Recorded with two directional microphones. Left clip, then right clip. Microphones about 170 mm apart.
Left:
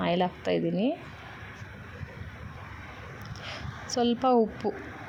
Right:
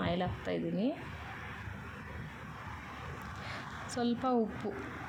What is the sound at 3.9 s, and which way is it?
Speech, 35° left (ahead or behind).